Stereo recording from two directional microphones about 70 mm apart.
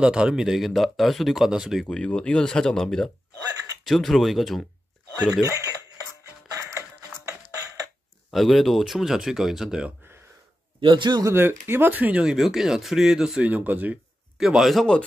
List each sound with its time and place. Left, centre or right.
0.0 s speech: centre
1.9 s speech: centre
5.4 s speech: right
6.5 s music: right
8.3 s speech: centre
11.0 s speech: right
11.3 s speech: right
12.2 s speech: centre
13.4 s speech: right
14.4 s speech: centre